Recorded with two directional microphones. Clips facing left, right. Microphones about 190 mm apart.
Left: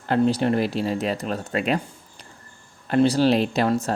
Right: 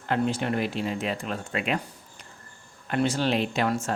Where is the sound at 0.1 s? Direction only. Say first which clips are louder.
Left 6 dB; 35° left (ahead or behind).